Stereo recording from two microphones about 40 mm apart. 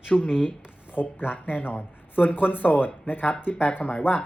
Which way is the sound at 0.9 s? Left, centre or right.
Left.